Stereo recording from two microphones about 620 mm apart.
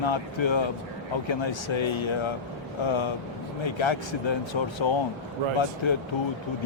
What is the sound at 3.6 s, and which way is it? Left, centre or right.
Speech, left.